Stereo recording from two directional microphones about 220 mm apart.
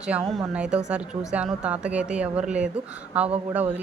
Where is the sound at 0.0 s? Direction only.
5° right (ahead or behind).